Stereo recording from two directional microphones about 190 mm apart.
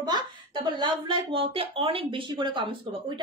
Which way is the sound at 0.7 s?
25° right (ahead or behind).